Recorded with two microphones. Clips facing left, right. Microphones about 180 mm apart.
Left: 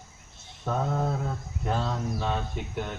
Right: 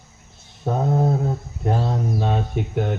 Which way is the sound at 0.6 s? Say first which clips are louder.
Right 7 dB; 35° right (ahead or behind).